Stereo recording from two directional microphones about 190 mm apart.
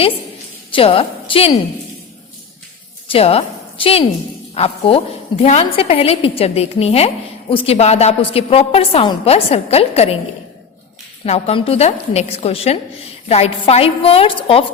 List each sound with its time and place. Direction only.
0.7 s a woman's voice: 30° left (ahead or behind)
3.1 s a woman's voice: 30° left (ahead or behind)
11.3 s a woman's voice: 30° left (ahead or behind)